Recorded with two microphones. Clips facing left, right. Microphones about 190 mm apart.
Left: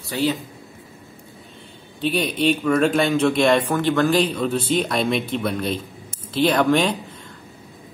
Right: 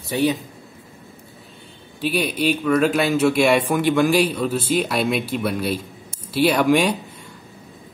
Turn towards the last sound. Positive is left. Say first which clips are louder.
# right 1 dB
turn(degrees=-10)  # may be behind; listen again after turning